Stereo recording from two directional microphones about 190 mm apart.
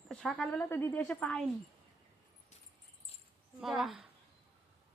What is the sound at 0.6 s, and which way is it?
Speech, 15° left (ahead or behind).